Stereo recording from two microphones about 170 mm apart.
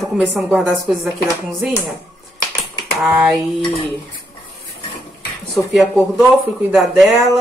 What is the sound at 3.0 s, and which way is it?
Speech, 5° right (ahead or behind).